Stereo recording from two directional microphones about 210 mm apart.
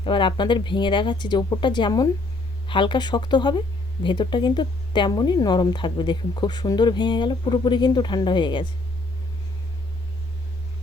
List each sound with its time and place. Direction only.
0.0 s speech: 25° left (ahead or behind)